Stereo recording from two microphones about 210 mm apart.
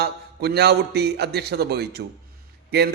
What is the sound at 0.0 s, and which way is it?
A man's voice, 50° right (ahead or behind).